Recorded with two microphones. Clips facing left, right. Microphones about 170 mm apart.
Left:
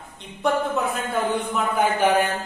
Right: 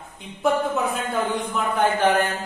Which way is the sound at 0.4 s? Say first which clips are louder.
Right 1 dB; centre (ahead or behind).